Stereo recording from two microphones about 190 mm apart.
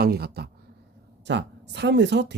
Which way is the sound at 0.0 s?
55° right (ahead or behind).